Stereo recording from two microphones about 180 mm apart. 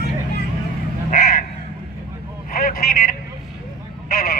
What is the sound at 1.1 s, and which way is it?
Crow, 50° left (ahead or behind).